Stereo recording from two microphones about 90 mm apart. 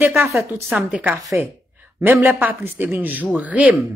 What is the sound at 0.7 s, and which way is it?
Speech, 15° right (ahead or behind).